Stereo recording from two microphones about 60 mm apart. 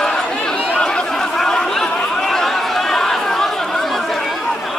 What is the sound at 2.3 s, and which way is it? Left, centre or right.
Chatter, centre.